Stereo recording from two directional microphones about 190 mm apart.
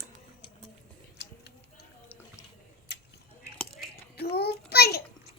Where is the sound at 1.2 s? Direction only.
60° left (ahead or behind).